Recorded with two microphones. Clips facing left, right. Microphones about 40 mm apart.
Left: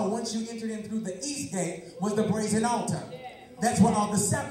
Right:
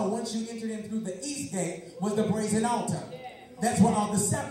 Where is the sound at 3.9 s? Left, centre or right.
Right.